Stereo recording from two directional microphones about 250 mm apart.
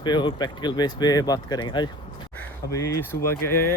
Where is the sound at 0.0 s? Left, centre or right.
Centre.